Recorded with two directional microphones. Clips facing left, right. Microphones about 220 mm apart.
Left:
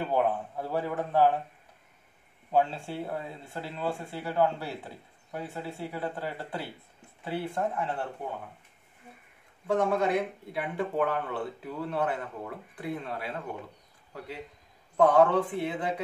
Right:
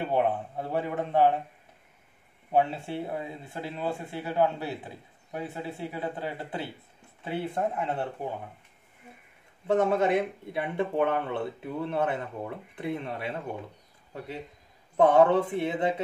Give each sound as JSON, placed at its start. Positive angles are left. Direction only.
{"t": 0.0, "sound": "speech", "side_deg": -20}
{"t": 2.5, "sound": "speech", "side_deg": -20}
{"t": 9.7, "sound": "speech", "side_deg": -25}
{"t": 15.0, "sound": "speech", "side_deg": -25}